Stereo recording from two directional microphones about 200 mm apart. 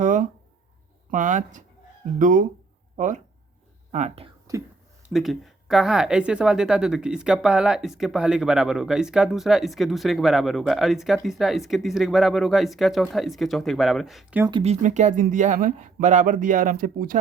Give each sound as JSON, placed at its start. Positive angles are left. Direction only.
{"t": 0.0, "sound": "a sound", "side_deg": -40}
{"t": 1.1, "sound": "speech", "side_deg": -40}
{"t": 4.5, "sound": "speech", "side_deg": -15}
{"t": 5.0, "sound": "speech", "side_deg": 0}
{"t": 14.6, "sound": "speech", "side_deg": -35}